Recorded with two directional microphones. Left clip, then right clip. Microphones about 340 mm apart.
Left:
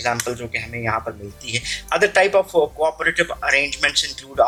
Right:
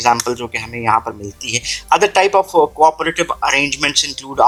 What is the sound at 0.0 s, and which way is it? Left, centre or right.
Speech, centre.